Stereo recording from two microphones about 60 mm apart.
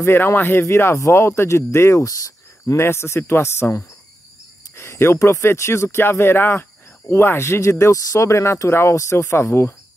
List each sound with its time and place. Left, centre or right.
0.0 s speech: left
1.1 s speech: left
2.0 s cricket: left
2.8 s speech: left
7.9 s speech: left